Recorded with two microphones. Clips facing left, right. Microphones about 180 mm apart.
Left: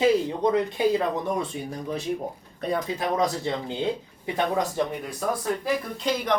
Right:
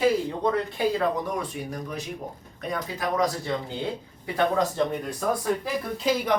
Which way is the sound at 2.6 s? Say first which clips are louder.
Left 4 dB; 30° left (ahead or behind).